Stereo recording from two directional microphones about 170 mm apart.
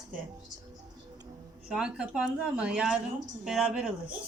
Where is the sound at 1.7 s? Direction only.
5° right (ahead or behind).